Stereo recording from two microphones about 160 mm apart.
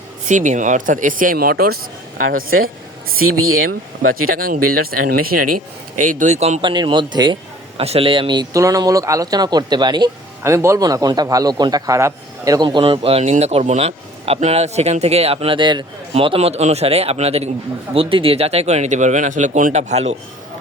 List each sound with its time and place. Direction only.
0.3 s speech: 50° right (ahead or behind); by 1.8 s 70° right (ahead or behind)
4.0 s speech: 65° right (ahead or behind)
6.0 s speech: 55° right (ahead or behind)
6.6 s speech: 30° right (ahead or behind)
12.6 s a man's voice: 35° right (ahead or behind)